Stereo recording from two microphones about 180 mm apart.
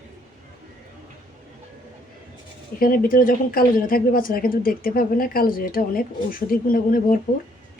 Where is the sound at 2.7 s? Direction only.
50° left (ahead or behind).